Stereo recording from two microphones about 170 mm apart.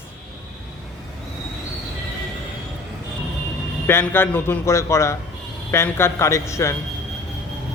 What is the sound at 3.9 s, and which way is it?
Speech, 15° left (ahead or behind).